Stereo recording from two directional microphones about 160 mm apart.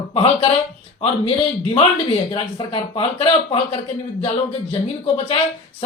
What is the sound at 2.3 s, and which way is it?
Speech, 30° left (ahead or behind).